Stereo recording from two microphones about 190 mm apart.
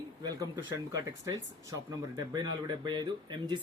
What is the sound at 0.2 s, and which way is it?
Speech, 20° right (ahead or behind).